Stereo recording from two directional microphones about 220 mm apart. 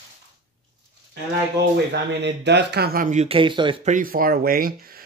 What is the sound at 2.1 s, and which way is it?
Speech, 50° right (ahead or behind).